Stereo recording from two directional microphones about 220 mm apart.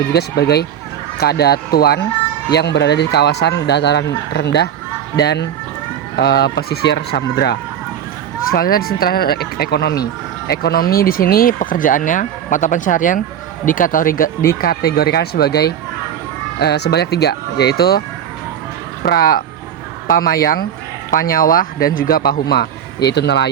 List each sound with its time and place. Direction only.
0.1 s speech: 45° left (ahead or behind)
19.0 s speech: 45° left (ahead or behind)